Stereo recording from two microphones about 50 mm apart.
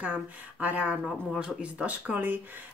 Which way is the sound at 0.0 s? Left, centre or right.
Right.